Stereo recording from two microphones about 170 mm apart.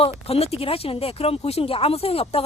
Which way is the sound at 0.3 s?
35° left (ahead or behind).